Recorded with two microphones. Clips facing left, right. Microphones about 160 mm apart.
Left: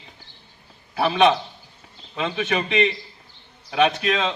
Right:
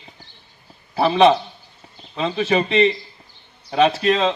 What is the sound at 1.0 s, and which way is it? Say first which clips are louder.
A man's voice: right 4 dB; 30° right (ahead or behind).